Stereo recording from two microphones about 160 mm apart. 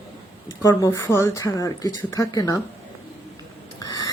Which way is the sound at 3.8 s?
25° left (ahead or behind).